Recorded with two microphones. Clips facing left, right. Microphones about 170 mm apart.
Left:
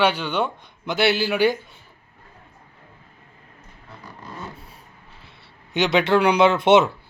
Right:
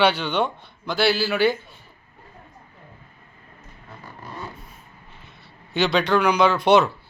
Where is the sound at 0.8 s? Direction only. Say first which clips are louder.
Left 1 dB; 20° left (ahead or behind).